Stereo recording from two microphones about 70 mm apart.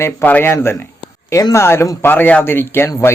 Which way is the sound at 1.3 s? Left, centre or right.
Left.